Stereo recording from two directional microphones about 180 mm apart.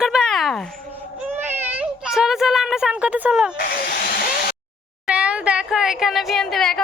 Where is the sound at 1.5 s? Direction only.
10° right (ahead or behind).